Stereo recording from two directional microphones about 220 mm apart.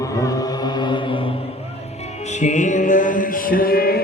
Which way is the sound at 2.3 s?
35° left (ahead or behind).